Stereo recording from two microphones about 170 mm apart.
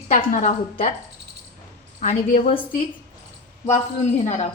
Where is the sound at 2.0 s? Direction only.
45° left (ahead or behind).